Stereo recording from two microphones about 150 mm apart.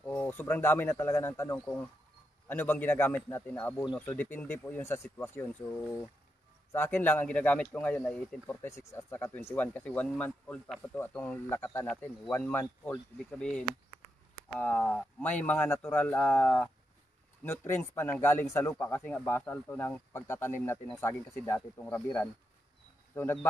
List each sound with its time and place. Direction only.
0.0 s speech: 15° left (ahead or behind)
8.6 s speech: 20° left (ahead or behind)